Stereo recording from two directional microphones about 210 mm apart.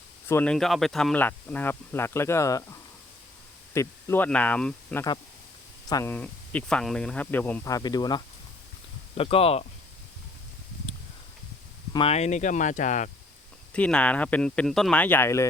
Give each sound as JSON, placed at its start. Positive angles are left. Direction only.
{"t": 0.3, "sound": "speech", "side_deg": 10}
{"t": 3.8, "sound": "speech", "side_deg": 10}
{"t": 11.9, "sound": "speech", "side_deg": 30}
{"t": 13.7, "sound": "speech", "side_deg": 5}